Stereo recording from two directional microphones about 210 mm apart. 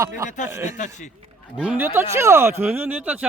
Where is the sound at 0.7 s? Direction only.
35° left (ahead or behind).